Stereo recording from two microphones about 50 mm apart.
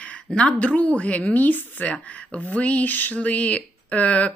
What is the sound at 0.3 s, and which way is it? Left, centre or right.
Speech, centre.